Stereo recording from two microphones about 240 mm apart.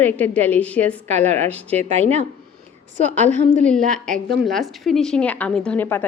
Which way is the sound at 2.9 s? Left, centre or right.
Right.